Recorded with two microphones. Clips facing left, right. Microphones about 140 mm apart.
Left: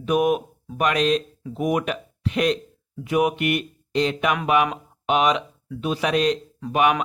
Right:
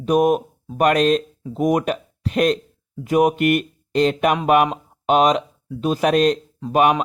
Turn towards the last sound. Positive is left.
turn(degrees=-40)  # may be behind; listen again after turning